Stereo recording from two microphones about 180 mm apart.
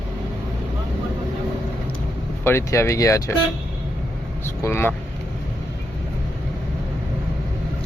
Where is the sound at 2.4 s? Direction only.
15° left (ahead or behind).